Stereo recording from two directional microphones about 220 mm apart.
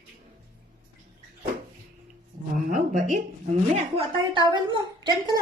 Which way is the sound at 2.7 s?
35° right (ahead or behind).